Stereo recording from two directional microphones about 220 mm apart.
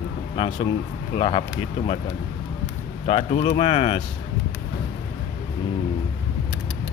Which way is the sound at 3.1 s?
30° left (ahead or behind).